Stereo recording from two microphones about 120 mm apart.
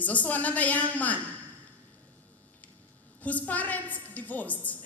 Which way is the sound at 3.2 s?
15° left (ahead or behind).